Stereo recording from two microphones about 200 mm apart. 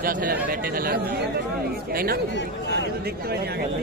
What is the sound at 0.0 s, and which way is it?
Speech, 45° right (ahead or behind).